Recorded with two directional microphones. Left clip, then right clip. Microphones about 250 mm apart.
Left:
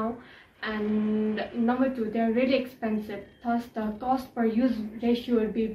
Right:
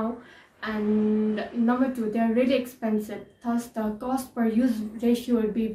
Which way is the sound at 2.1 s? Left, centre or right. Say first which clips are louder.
Right 2 dB; centre.